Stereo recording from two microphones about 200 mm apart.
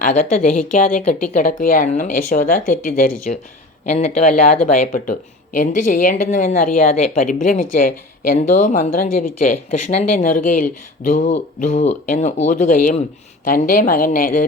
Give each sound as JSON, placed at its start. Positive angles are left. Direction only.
{"t": 0.0, "sound": "a woman's voice", "side_deg": 40}